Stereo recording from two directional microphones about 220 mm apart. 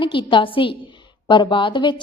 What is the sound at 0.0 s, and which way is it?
A woman's voice, 20° left (ahead or behind).